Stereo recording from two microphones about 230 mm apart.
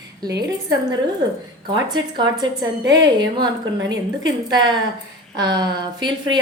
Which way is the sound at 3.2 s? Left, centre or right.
Centre.